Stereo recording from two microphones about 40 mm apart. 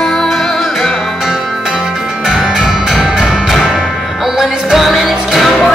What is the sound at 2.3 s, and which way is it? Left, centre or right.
Music, centre.